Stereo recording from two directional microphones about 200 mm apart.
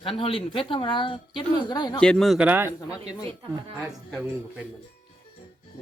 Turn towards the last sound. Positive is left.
turn(degrees=-5)  # may be behind; listen again after turning